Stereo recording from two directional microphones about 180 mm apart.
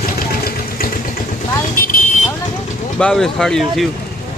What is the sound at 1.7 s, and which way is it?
Vehicle, 50° left (ahead or behind).